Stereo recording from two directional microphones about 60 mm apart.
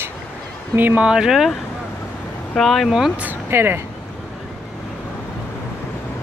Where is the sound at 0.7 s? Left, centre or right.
Right.